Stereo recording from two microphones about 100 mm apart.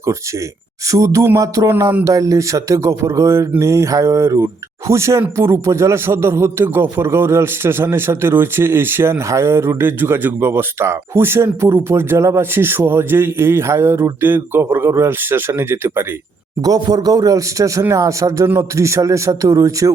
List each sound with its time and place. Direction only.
0.9 s a man's voice: 30° right (ahead or behind)
16.6 s a man's voice: 40° right (ahead or behind)